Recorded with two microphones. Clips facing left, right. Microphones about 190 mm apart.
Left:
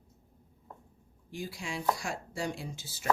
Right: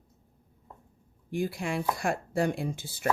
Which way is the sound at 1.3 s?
55° right (ahead or behind).